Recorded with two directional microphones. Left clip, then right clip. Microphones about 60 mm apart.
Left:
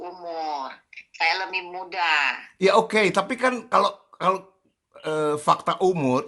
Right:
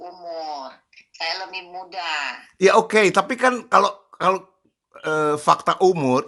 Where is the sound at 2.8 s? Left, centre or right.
Right.